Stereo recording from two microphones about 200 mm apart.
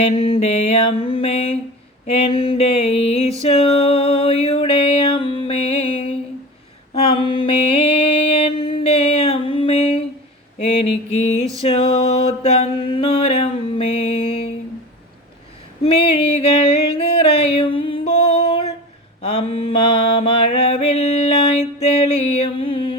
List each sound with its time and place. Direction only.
0.0 s music: 30° left (ahead or behind)
2.0 s mantra: 30° left (ahead or behind)
3.4 s music: 30° left (ahead or behind)
6.9 s mantra: 25° left (ahead or behind)
10.6 s a sound: 30° left (ahead or behind)
15.8 s a sound: 30° left (ahead or behind)
19.2 s mantra: 30° left (ahead or behind)